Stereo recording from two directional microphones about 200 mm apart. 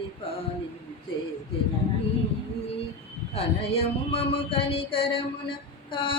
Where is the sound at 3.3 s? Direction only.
30° left (ahead or behind).